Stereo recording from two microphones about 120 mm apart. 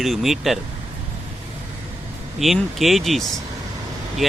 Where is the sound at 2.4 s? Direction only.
Centre (ahead or behind).